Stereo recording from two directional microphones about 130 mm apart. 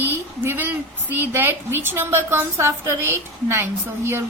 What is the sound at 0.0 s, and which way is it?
A woman's voice, 15° right (ahead or behind).